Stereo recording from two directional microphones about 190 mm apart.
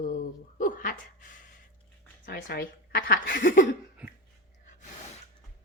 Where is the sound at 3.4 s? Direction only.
45° left (ahead or behind).